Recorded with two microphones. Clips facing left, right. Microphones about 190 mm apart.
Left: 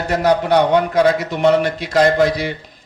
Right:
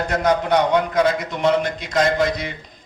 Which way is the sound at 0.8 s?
60° left (ahead or behind).